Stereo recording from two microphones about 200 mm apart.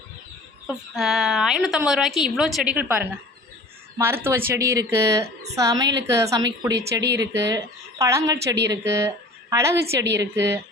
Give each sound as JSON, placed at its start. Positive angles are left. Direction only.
{"t": 0.7, "sound": "a woman's voice", "side_deg": 0}
{"t": 7.0, "sound": "speech", "side_deg": -60}
{"t": 7.3, "sound": "a woman's voice", "side_deg": -15}